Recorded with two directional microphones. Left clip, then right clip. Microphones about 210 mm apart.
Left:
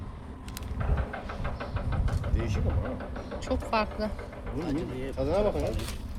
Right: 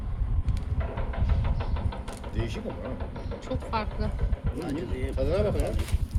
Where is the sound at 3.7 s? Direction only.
35° left (ahead or behind).